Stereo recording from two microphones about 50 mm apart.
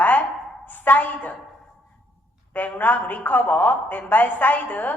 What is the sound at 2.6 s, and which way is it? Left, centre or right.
A woman's voice, left.